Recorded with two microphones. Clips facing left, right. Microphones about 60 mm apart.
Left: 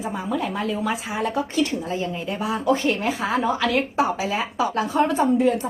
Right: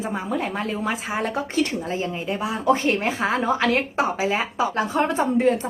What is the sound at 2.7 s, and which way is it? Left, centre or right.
A woman's voice, right.